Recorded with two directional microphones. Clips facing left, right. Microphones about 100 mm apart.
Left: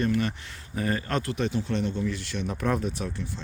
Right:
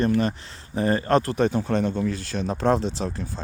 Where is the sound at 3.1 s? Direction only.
40° right (ahead or behind).